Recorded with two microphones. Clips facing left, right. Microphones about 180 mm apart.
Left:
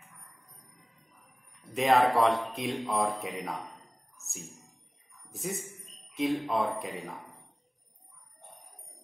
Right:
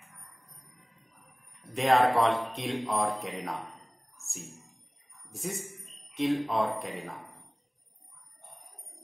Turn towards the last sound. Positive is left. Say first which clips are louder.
# right 1 dB
turn(degrees=0)  # may be behind; listen again after turning